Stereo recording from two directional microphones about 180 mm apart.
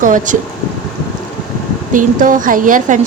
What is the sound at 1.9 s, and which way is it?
A woman's voice, 45° right (ahead or behind).